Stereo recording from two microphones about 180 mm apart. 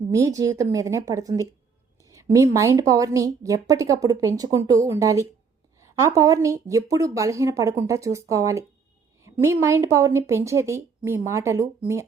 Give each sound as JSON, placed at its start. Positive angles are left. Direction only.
{"t": 0.1, "sound": "speech", "side_deg": -20}